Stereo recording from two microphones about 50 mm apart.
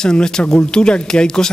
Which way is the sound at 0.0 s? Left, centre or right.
Centre.